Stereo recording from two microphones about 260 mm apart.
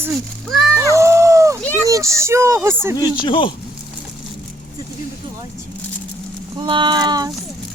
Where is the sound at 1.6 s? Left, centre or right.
Centre.